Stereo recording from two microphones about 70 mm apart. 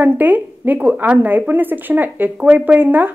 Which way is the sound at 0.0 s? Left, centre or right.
Right.